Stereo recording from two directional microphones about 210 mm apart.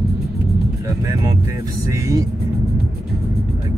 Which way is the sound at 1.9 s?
15° right (ahead or behind).